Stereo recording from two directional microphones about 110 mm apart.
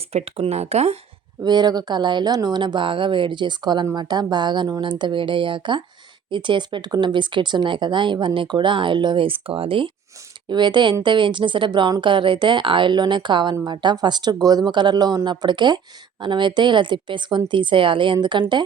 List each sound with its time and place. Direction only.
0.1 s speech: 65° right (ahead or behind)
1.4 s speech: 40° right (ahead or behind)